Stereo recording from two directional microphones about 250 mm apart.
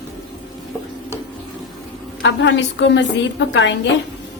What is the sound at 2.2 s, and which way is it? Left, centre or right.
A woman's voice, left.